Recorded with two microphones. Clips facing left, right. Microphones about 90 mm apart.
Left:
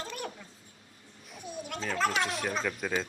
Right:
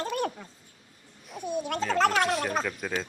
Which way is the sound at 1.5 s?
55° right (ahead or behind).